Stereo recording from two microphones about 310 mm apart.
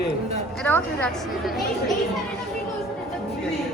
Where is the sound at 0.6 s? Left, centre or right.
Centre.